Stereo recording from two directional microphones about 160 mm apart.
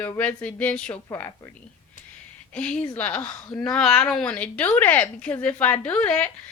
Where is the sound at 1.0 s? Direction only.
20° left (ahead or behind).